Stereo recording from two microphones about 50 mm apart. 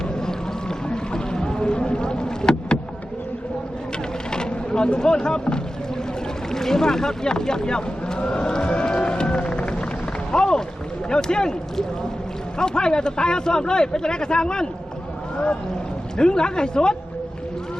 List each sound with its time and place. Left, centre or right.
0.1 s boat: centre
0.9 s rowboat: centre
4.3 s a sound: centre
6.5 s boat: centre
10.3 s a sound: centre
11.1 s a man's voice: centre
16.1 s a man's voice: centre